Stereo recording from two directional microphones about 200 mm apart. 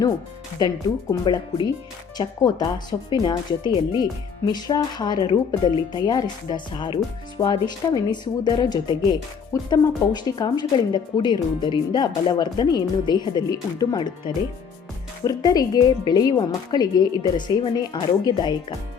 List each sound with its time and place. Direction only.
1.1 s speech: 25° left (ahead or behind)